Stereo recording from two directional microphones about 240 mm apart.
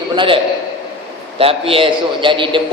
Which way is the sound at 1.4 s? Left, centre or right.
Right.